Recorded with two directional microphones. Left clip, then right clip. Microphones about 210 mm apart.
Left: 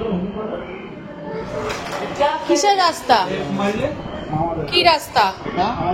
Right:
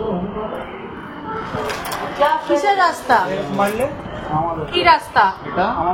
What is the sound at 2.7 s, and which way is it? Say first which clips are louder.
Speech: even; 20° left (ahead or behind).